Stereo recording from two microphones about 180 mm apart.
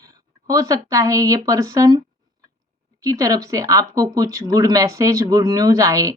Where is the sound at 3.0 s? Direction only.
20° right (ahead or behind).